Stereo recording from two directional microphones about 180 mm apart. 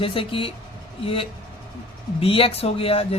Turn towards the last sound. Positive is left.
turn(degrees=30)  # may be behind; listen again after turning